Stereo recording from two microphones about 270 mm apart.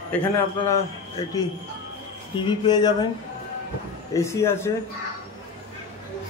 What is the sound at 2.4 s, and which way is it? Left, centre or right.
Speech, centre.